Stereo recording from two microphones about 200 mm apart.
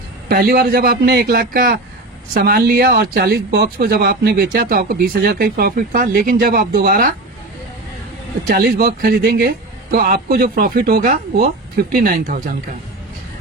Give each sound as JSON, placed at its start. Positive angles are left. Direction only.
{"t": 0.3, "sound": "speech", "side_deg": -50}
{"t": 8.4, "sound": "speech", "side_deg": -50}